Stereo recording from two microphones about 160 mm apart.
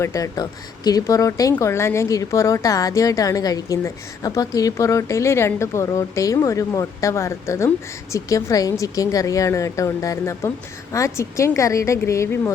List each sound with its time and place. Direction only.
0.0 s speech: 20° left (ahead or behind)